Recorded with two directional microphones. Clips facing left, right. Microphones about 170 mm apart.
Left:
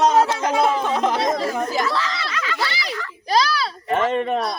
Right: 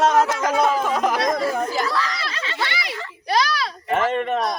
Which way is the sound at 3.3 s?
30° left (ahead or behind).